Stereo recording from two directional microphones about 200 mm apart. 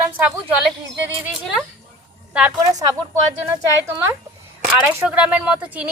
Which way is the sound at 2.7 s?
20° right (ahead or behind).